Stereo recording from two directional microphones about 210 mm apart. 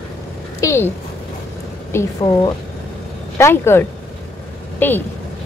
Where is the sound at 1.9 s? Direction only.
15° left (ahead or behind).